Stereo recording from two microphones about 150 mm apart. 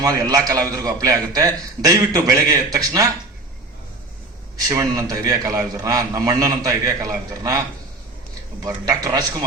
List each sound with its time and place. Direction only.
0.0 s a man's voice: 25° right (ahead or behind)
4.7 s a man's voice: 20° right (ahead or behind)
8.6 s a man's voice: 20° right (ahead or behind)